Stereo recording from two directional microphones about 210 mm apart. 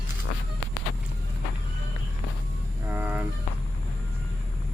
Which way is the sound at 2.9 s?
10° right (ahead or behind).